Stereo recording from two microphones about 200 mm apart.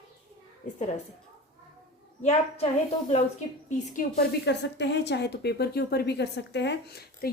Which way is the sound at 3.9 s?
45° left (ahead or behind).